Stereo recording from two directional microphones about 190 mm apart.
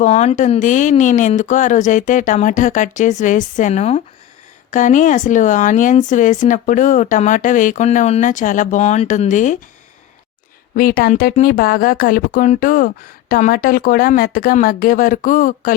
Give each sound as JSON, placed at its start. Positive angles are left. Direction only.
{"t": 0.0, "sound": "speech", "side_deg": 35}
{"t": 10.8, "sound": "speech", "side_deg": 50}